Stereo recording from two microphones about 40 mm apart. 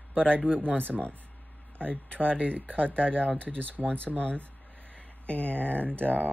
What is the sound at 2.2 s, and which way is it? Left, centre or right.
Speech, right.